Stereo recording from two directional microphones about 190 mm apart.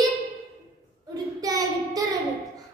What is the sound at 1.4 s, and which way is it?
Child singing, 20° right (ahead or behind).